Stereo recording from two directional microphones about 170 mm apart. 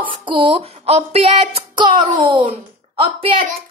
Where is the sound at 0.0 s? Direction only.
30° right (ahead or behind).